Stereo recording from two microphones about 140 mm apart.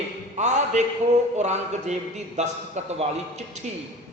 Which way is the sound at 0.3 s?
55° right (ahead or behind).